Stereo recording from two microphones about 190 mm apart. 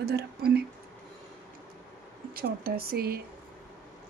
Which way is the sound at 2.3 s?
50° right (ahead or behind).